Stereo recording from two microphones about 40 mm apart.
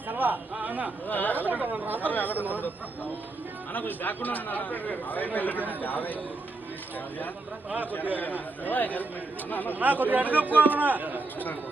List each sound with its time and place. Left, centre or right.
0.1 s a sound: right
0.5 s speech: right
1.0 s a man's voice: left
1.5 s a man's voice: right
2.0 s a man's voice: left
3.7 s a man's voice: left
8.2 s a man's voice: left
9.7 s a man's voice: right